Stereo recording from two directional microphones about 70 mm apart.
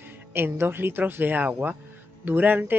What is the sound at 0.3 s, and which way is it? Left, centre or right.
Speech, right.